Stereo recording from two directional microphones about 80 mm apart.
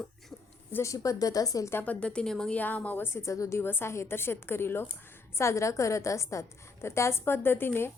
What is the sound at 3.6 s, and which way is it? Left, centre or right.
A woman's voice, left.